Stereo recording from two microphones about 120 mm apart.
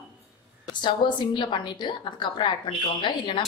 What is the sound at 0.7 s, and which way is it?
A woman's voice, 40° left (ahead or behind).